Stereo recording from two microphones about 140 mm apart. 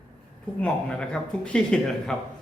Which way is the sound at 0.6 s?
5° left (ahead or behind).